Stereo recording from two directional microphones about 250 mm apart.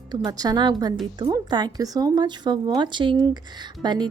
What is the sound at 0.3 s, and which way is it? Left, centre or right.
Speech, centre.